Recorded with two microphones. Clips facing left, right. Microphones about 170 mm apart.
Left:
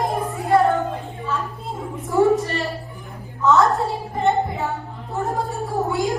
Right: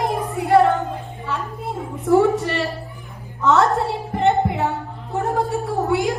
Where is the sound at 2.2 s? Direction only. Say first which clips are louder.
Left 1 dB; 65° right (ahead or behind).